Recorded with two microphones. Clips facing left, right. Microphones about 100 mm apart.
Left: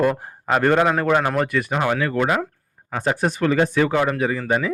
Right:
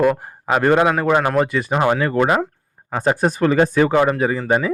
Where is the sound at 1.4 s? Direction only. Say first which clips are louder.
Right 3 dB; 25° right (ahead or behind).